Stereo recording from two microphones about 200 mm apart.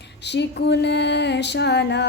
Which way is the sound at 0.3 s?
60° left (ahead or behind).